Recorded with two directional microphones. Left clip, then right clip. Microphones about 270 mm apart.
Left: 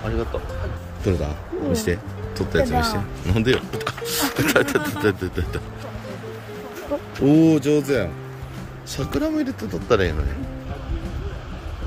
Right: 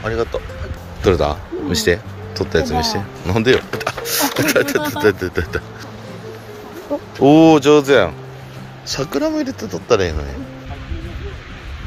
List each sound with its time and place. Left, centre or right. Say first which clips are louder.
0.0 s speech: right 6 dB; centre
7.2 s a man's voice: right 7 dB; centre